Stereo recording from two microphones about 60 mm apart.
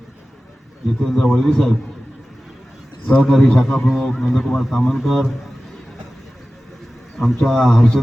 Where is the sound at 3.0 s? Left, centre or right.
Centre.